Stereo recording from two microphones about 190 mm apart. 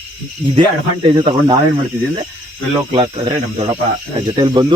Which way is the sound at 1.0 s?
25° right (ahead or behind).